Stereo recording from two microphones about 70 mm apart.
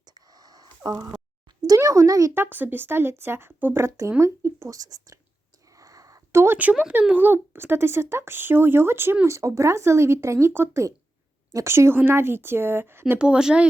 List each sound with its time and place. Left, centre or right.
0.0 s a sound: right
1.6 s a child's voice: right
2.3 s speech: right
5.7 s a sound: right
6.3 s speech: right
7.1 s speech: right
13.1 s speech: centre